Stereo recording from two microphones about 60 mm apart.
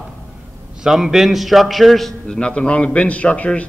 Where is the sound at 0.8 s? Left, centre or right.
Centre.